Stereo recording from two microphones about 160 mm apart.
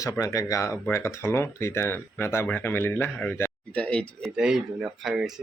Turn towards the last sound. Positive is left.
turn(degrees=-5)  # may be behind; listen again after turning